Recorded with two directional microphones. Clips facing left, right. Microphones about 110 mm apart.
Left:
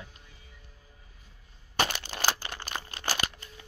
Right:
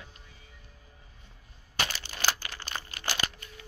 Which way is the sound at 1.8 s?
55° left (ahead or behind).